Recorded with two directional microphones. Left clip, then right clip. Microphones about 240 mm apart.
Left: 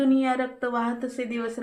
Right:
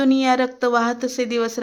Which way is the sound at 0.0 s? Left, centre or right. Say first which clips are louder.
Right 6 dB; right.